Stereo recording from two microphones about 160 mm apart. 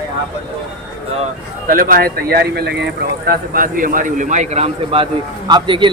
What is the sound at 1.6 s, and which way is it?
A man's voice, 60° right (ahead or behind).